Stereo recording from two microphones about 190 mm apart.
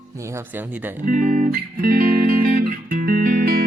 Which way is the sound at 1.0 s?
45° right (ahead or behind).